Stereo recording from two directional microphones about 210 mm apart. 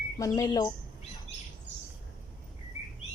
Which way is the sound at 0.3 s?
15° left (ahead or behind).